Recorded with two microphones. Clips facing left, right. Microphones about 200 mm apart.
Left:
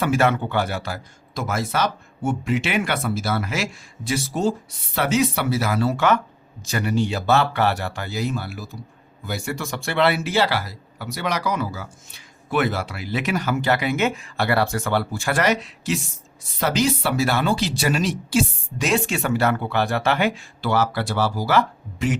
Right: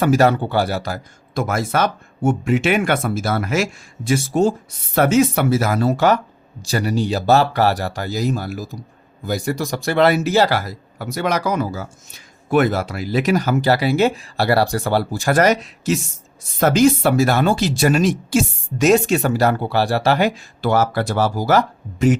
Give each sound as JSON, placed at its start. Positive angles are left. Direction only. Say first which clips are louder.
{"t": 0.0, "sound": "speech", "louder": "right 5 dB", "side_deg": -40}